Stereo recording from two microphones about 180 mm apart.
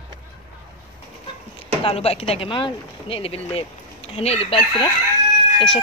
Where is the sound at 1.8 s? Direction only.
35° left (ahead or behind).